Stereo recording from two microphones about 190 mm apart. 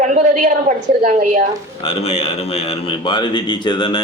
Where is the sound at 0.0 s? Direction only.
40° right (ahead or behind).